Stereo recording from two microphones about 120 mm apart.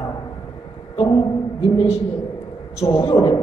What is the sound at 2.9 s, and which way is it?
Speech, 35° left (ahead or behind).